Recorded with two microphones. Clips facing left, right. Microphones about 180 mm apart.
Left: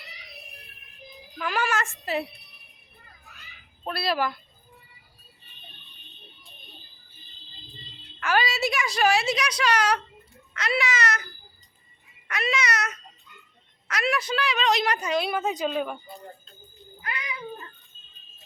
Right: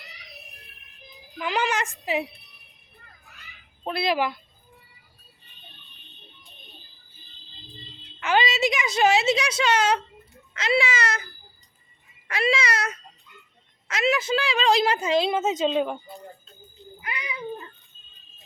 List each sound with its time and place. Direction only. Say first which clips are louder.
1.4 s a child's voice: right 1 dB; 20° right (ahead or behind)
3.8 s a woman's voice: right 2 dB; 20° right (ahead or behind)
8.2 s a woman's voice: right 2 dB; 20° right (ahead or behind)
12.3 s a woman's voice: right 3 dB; 30° right (ahead or behind)
17.0 s cat: even; 15° right (ahead or behind)